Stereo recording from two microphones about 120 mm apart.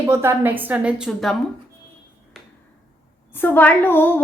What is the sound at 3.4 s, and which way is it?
Speech, 15° left (ahead or behind).